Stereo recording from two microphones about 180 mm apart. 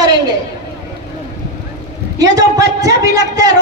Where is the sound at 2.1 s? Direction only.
20° right (ahead or behind).